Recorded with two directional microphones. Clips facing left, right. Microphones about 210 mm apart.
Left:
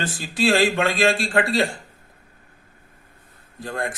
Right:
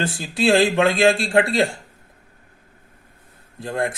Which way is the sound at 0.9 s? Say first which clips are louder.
Right 4 dB; 25° right (ahead or behind).